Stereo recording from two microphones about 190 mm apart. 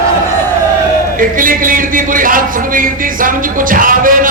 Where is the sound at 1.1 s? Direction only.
45° right (ahead or behind).